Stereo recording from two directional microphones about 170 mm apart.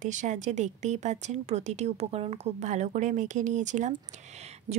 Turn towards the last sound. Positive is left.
turn(degrees=-40)  # may be behind; listen again after turning